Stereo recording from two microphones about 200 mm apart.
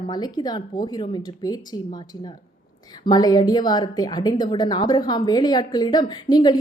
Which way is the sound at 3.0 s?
20° left (ahead or behind).